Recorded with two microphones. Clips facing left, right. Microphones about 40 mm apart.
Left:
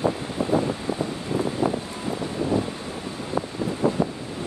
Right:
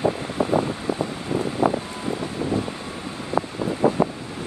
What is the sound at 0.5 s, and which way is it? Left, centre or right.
Wind, right.